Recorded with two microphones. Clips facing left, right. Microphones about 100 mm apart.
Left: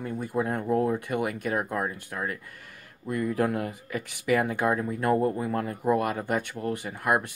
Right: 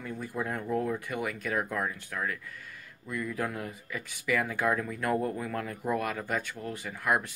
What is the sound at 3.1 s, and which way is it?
Speech, 50° left (ahead or behind).